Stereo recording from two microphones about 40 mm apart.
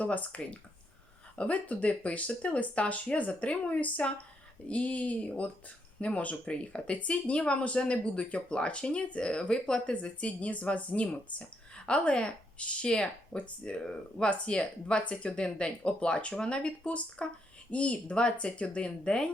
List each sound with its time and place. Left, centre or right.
0.0 s speech: left
9.9 s speech: left